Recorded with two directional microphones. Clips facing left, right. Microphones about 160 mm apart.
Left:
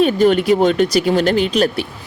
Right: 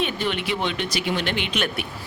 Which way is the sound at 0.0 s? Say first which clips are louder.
Left 13 dB; 40° left (ahead or behind).